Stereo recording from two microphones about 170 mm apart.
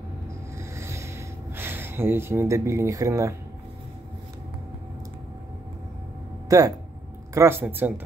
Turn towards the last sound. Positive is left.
turn(degrees=-10)  # may be behind; listen again after turning